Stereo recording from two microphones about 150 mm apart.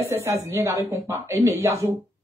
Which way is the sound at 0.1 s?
15° right (ahead or behind).